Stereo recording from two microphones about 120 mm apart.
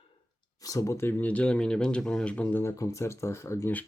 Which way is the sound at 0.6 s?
25° left (ahead or behind).